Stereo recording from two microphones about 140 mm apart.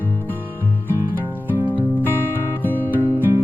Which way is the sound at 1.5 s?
15° left (ahead or behind).